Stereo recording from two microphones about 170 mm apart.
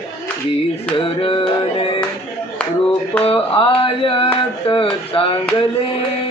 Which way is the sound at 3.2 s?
30° left (ahead or behind).